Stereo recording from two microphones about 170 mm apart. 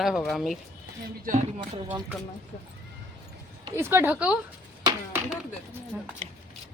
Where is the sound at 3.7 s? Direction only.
15° right (ahead or behind).